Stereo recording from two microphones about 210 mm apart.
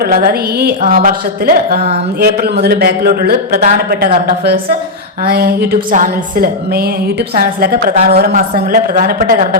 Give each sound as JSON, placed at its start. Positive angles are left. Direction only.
{"t": 0.0, "sound": "a woman's voice", "side_deg": -45}